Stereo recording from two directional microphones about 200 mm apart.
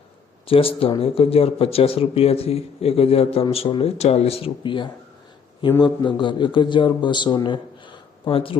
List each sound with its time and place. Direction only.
0.4 s speech: 30° left (ahead or behind)